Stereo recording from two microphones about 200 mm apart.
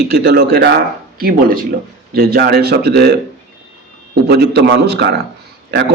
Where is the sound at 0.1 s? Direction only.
50° right (ahead or behind).